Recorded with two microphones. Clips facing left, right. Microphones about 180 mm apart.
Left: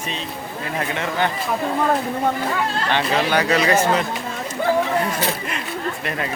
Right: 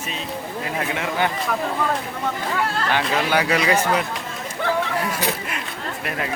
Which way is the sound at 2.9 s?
10° right (ahead or behind).